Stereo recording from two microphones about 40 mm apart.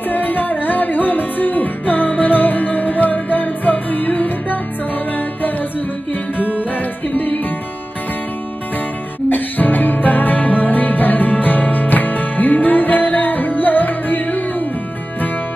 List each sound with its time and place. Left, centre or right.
0.1 s music: left
6.3 s music: left
9.3 s music: left